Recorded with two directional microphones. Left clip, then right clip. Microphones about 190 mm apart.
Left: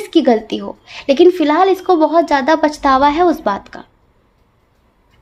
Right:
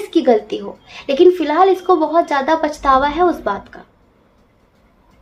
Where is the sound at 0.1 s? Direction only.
45° left (ahead or behind).